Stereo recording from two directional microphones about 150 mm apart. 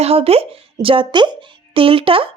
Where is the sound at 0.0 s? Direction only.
40° right (ahead or behind).